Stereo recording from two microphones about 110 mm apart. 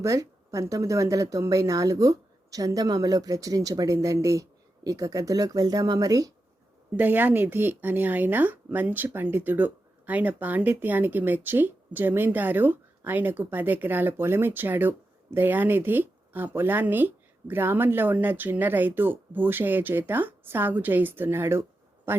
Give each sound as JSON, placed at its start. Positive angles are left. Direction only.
{"t": 0.0, "sound": "speech", "side_deg": -30}
{"t": 6.9, "sound": "speech", "side_deg": -15}